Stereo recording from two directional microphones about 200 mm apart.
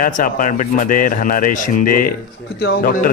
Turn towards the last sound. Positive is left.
turn(degrees=45)  # may be behind; listen again after turning